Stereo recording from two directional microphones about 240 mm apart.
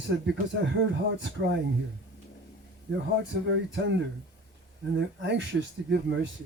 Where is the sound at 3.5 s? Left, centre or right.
Right.